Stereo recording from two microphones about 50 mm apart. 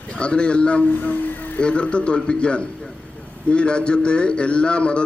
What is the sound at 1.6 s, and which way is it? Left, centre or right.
A man's voice, left.